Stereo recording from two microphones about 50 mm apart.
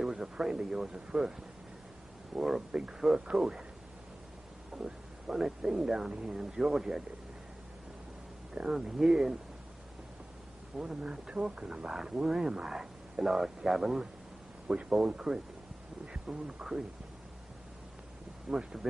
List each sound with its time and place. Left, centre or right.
0.0 s speech: centre
2.3 s speech: centre
4.7 s speech: centre
8.5 s speech: centre
10.8 s speech: centre
14.7 s speech: right
18.5 s speech: centre